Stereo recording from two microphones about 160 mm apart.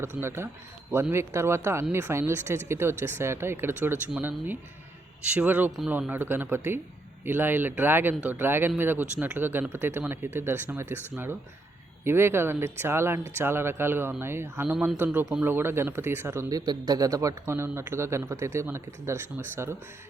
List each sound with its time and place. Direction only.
0.0 s speech: 15° right (ahead or behind)
12.0 s speech: 15° right (ahead or behind)